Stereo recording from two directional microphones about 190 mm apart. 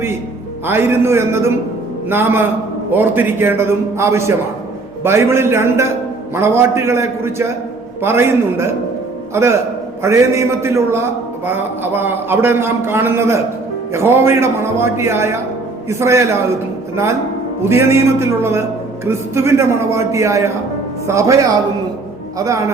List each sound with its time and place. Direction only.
0.6 s a man's voice: 10° right (ahead or behind)
22.4 s a man's voice: 15° right (ahead or behind)